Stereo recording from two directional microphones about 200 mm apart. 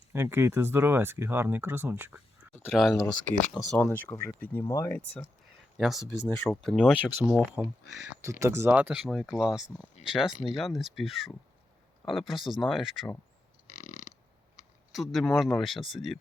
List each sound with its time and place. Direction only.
0.1 s speech: 10° right (ahead or behind); by 5.2 s 10° left (ahead or behind)
5.7 s speech: centre (ahead or behind)
6.1 s speech: 10° left (ahead or behind)
8.2 s speech: 15° right (ahead or behind)
13.7 s burping: 90° left
14.9 s speech: centre (ahead or behind)